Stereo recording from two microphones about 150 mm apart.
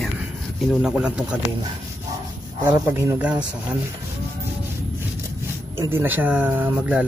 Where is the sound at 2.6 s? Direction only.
15° right (ahead or behind).